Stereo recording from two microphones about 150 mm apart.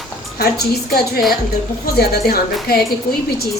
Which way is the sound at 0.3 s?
90° left.